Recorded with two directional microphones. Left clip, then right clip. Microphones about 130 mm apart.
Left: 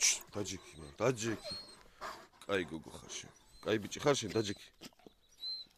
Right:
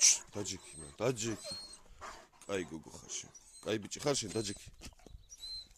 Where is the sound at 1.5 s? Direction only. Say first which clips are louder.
Even; 65° left (ahead or behind).